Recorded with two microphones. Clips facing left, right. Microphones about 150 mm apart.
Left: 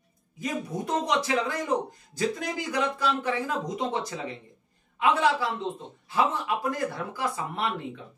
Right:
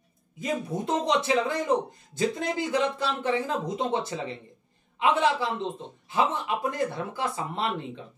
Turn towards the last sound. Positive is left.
turn(degrees=-25)  # may be behind; listen again after turning